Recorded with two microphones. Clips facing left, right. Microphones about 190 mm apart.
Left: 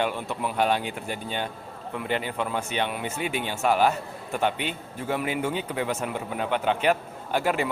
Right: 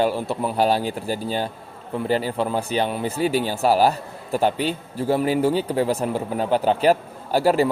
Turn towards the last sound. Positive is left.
turn(degrees=-35)  # may be behind; listen again after turning